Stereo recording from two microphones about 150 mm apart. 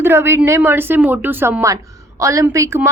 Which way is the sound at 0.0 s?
15° right (ahead or behind).